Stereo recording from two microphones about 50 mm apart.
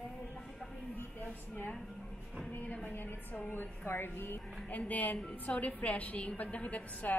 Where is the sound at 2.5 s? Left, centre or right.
Left.